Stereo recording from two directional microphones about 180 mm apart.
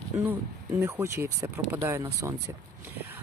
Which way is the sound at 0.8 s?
15° right (ahead or behind).